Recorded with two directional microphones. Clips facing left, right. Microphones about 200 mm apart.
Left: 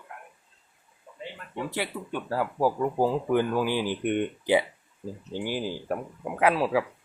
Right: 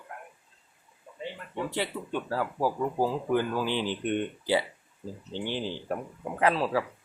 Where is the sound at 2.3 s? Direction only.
15° left (ahead or behind).